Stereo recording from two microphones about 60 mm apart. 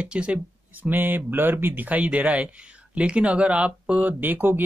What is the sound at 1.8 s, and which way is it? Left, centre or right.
Speech, right.